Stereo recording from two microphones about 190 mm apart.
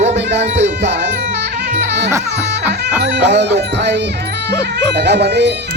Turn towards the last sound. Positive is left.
turn(degrees=-65)  # may be behind; listen again after turning